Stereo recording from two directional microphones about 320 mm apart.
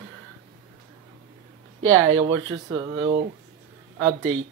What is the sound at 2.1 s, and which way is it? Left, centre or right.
Speech, centre.